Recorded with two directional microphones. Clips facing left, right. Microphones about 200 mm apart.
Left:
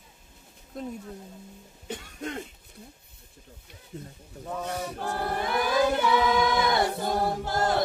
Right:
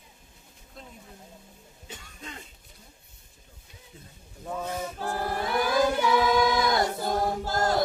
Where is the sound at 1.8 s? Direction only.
60° left (ahead or behind).